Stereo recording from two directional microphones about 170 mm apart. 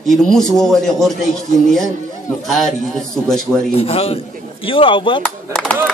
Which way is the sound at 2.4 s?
Centre (ahead or behind).